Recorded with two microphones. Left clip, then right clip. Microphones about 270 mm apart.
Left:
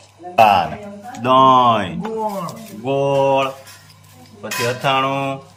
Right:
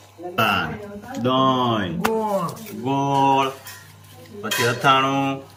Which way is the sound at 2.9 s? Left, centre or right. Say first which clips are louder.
Left 3 dB; centre.